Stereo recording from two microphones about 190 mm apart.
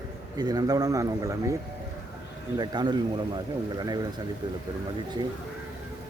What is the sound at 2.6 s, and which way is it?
A man's voice, 20° right (ahead or behind).